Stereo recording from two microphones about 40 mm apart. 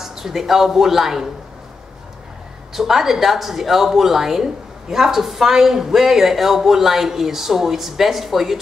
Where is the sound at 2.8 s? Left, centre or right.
Centre.